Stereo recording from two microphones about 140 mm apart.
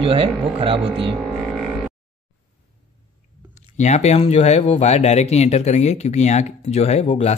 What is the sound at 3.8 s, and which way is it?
Speech, 55° left (ahead or behind).